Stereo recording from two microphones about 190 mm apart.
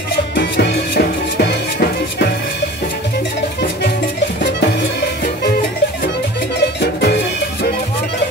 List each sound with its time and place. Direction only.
0.3 s music: 60° left (ahead or behind)
6.8 s music: 60° left (ahead or behind)